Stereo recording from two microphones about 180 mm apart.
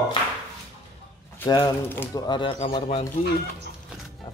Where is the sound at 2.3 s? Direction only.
30° left (ahead or behind).